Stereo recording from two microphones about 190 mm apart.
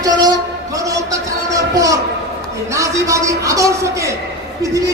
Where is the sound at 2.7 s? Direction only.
15° right (ahead or behind).